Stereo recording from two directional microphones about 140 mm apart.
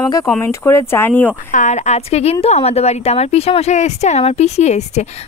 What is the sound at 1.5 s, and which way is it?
A woman's voice, 60° left (ahead or behind).